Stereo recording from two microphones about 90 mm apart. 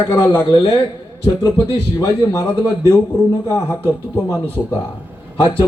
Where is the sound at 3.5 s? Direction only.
25° left (ahead or behind).